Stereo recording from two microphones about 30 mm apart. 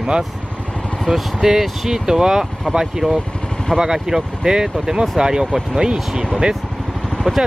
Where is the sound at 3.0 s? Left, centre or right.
Left.